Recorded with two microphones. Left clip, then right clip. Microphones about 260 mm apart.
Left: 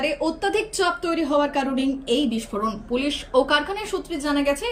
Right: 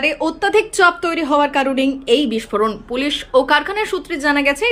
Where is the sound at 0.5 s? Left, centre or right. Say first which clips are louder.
Right 9 dB; centre.